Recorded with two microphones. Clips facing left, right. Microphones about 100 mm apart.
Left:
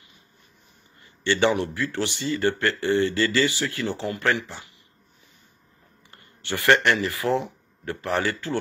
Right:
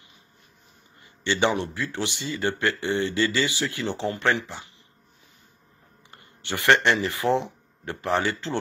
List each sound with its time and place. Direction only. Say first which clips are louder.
1.2 s a man's voice: left 2 dB; 20° right (ahead or behind)
6.1 s speech: left 1 dB; 20° right (ahead or behind)